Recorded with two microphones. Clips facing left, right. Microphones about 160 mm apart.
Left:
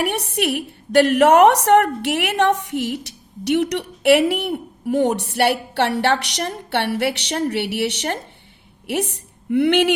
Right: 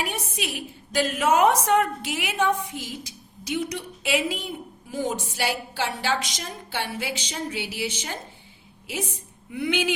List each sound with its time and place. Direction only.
0.0 s a woman's voice: 70° left (ahead or behind)